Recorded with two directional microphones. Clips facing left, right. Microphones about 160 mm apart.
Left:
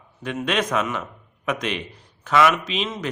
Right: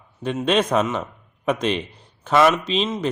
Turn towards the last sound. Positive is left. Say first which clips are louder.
# right 5 dB
turn(degrees=-30)  # may be behind; listen again after turning